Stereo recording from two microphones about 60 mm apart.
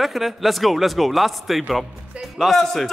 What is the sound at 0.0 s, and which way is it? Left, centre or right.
A man's voice, centre.